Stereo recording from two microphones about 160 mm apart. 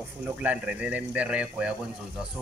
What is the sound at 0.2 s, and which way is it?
Speech, 10° right (ahead or behind).